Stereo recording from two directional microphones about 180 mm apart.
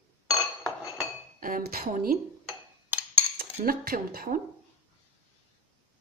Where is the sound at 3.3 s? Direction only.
55° right (ahead or behind).